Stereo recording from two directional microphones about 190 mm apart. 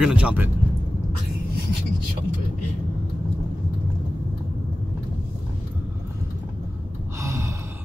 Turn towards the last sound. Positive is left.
turn(degrees=-15)  # may be behind; listen again after turning